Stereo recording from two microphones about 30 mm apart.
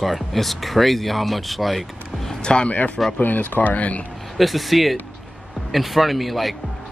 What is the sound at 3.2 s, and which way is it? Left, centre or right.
Speech, left.